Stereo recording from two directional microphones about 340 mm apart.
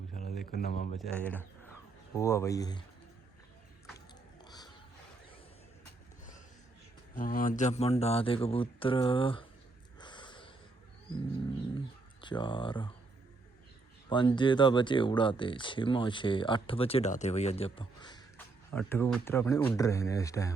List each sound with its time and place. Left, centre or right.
0.1 s a sound: left
0.5 s speech: left
0.9 s speech: centre
4.4 s a sound: centre
7.2 s speech: left
10.0 s snort: centre
12.2 s speech: centre
14.1 s speech: centre